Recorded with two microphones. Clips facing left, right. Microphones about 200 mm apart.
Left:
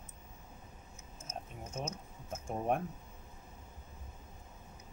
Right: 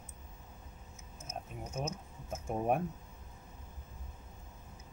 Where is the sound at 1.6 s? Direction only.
15° right (ahead or behind).